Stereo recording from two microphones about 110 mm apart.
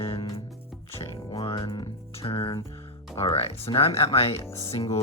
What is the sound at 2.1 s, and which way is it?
Music, 55° left (ahead or behind).